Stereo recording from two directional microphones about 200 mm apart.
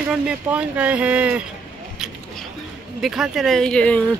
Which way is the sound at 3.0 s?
Centre (ahead or behind).